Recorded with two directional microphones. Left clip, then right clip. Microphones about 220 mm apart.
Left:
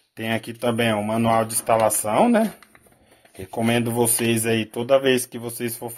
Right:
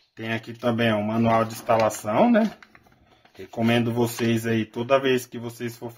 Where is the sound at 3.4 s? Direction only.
25° left (ahead or behind).